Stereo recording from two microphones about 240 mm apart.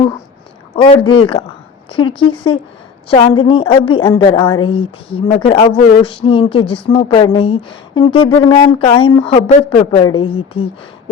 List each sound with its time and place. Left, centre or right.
0.8 s speech: left